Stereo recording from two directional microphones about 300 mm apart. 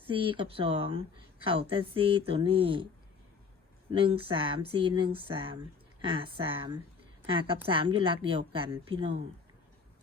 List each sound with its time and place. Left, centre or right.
0.0 s speech: centre
3.9 s speech: centre